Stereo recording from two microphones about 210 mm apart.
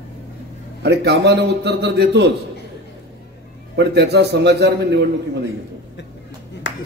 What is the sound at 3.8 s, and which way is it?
A man's voice, 55° right (ahead or behind).